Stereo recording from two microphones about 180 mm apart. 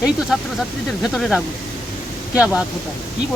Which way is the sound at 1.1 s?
Centre (ahead or behind).